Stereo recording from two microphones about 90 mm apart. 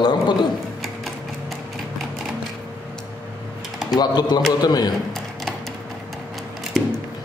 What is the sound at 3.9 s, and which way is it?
A man's voice, 50° left (ahead or behind).